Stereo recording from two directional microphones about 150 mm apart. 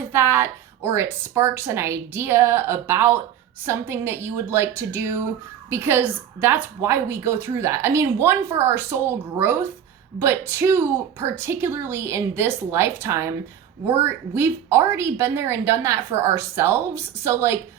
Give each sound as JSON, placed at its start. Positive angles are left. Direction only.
{"t": 0.1, "sound": "a woman's voice", "side_deg": -15}